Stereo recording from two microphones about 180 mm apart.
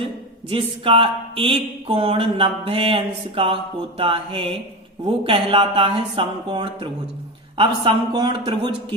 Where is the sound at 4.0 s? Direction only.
30° right (ahead or behind).